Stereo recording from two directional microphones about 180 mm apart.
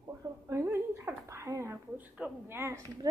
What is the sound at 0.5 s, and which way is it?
Speech, 15° right (ahead or behind).